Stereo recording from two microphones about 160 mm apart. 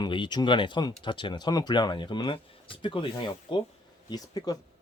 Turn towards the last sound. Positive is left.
turn(degrees=25)  # may be behind; listen again after turning